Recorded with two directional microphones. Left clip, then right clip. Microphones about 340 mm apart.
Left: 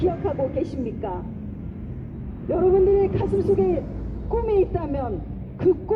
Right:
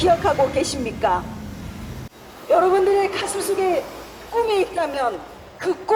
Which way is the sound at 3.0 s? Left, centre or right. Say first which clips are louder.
Even; right.